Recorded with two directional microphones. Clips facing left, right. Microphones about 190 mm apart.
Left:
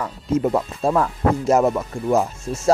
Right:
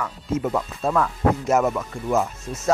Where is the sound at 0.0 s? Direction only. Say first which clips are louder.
Left 4 dB; 30° left (ahead or behind).